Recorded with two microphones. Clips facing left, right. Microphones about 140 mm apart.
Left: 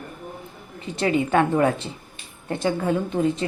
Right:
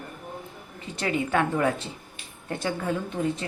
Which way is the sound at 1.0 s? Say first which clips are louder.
Left 5 dB; 25° left (ahead or behind).